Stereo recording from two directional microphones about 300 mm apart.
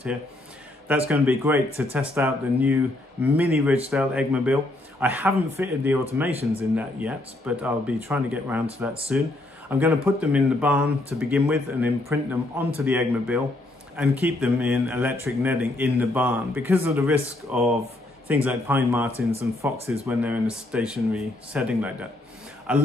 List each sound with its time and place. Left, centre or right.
0.8 s speech: centre